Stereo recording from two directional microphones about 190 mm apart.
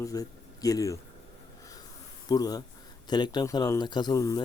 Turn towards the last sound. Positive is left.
turn(degrees=20)  # may be behind; listen again after turning